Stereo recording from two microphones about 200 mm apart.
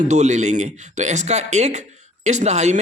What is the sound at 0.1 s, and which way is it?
A man's voice, 35° right (ahead or behind).